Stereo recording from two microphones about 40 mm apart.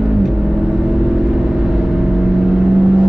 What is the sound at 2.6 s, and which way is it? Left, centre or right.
Vehicle, right.